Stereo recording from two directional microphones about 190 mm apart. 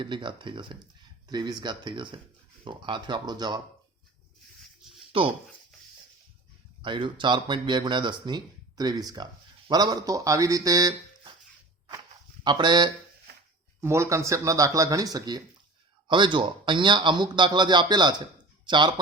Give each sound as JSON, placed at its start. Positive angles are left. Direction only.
{"t": 0.0, "sound": "speech", "side_deg": -25}
{"t": 5.1, "sound": "speech", "side_deg": -30}
{"t": 6.8, "sound": "speech", "side_deg": -25}
{"t": 12.4, "sound": "speech", "side_deg": -25}